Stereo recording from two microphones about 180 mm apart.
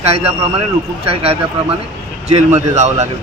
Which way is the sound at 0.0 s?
35° right (ahead or behind).